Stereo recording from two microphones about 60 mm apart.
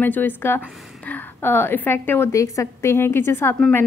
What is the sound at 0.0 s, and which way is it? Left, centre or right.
A woman's voice, left.